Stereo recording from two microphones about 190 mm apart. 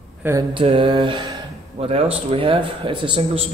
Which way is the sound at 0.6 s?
30° right (ahead or behind).